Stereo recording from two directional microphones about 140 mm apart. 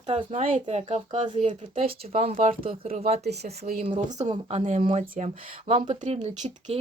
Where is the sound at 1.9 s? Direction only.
90° right.